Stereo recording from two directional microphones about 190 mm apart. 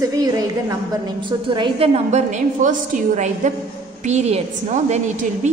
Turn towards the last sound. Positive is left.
turn(degrees=-40)  # may be behind; listen again after turning